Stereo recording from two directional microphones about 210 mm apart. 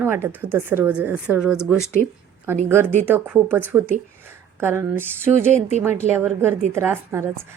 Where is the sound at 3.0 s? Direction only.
10° right (ahead or behind).